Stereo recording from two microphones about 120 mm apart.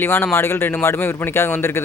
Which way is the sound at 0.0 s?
20° left (ahead or behind).